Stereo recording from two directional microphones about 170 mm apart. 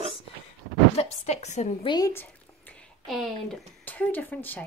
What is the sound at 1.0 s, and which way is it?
Speech, 40° left (ahead or behind).